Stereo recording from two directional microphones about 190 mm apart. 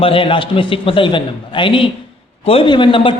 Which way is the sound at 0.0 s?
30° left (ahead or behind).